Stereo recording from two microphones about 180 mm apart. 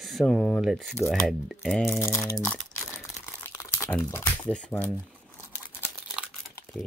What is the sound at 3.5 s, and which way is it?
Speech, 15° left (ahead or behind).